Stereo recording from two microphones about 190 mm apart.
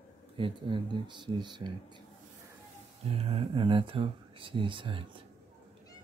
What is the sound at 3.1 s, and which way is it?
Speech, 30° right (ahead or behind).